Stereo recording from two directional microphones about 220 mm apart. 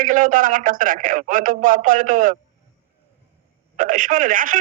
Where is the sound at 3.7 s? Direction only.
35° right (ahead or behind).